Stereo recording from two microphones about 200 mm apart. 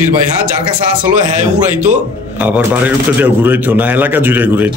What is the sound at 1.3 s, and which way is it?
Speech, 35° right (ahead or behind).